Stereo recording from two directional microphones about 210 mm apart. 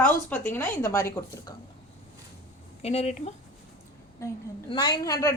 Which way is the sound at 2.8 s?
30° left (ahead or behind).